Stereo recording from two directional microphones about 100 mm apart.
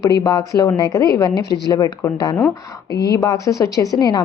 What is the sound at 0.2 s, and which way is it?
A woman's voice, 40° left (ahead or behind).